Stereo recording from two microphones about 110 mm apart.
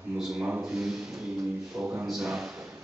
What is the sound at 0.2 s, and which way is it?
Speech, 5° right (ahead or behind).